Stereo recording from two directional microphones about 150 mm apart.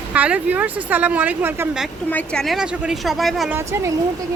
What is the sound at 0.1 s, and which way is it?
A woman's voice, 10° right (ahead or behind).